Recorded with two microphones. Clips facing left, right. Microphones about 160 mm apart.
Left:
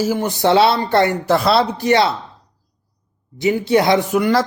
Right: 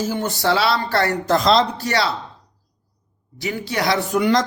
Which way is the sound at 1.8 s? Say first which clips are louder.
Left 6 dB; 20° left (ahead or behind).